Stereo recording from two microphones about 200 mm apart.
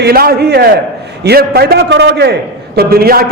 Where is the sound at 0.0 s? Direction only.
50° right (ahead or behind).